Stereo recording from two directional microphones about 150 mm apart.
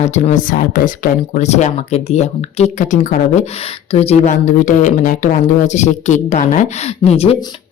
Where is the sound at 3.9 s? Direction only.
40° left (ahead or behind).